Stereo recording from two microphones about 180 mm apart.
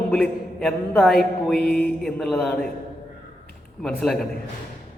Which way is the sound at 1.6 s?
60° left (ahead or behind).